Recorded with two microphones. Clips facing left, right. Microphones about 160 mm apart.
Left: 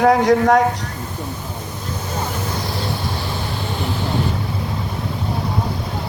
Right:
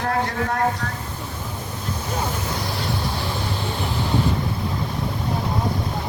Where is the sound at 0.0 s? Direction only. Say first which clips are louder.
Left 10 dB; 90° left.